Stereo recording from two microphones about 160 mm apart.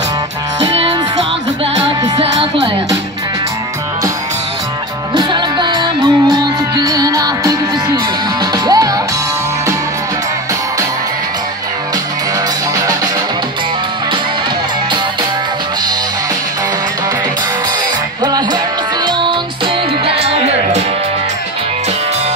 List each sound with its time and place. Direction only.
5.1 s music: 30° right (ahead or behind)
18.2 s music: 25° right (ahead or behind); by 20.8 s 40° right (ahead or behind)